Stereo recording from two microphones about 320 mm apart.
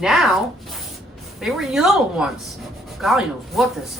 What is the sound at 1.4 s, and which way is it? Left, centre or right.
Speech, centre.